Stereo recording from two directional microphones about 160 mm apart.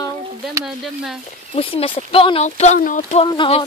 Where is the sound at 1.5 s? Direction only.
35° left (ahead or behind).